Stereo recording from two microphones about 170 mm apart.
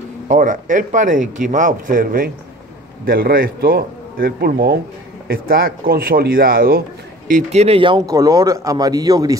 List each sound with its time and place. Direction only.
0.3 s a man's voice: 50° right (ahead or behind)
7.2 s speech: 45° right (ahead or behind); by 9.4 s 20° right (ahead or behind)